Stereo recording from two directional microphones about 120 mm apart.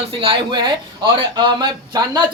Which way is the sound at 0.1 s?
50° right (ahead or behind).